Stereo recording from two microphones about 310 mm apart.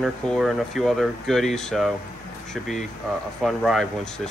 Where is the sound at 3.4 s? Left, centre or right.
Centre.